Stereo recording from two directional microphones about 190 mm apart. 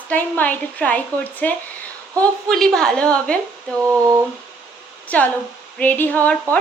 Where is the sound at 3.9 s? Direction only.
15° right (ahead or behind).